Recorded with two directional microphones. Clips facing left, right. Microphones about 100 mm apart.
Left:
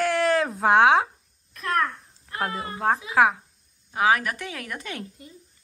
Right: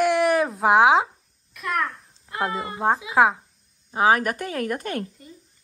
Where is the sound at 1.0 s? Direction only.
5° right (ahead or behind).